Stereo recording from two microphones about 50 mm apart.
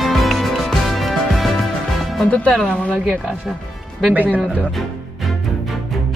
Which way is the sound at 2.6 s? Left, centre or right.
Centre.